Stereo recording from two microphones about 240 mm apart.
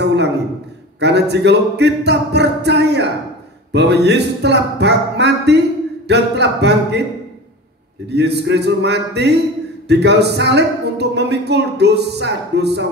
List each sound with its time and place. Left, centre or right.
0.0 s a sound: right
0.9 s speech: right
8.1 s speech: right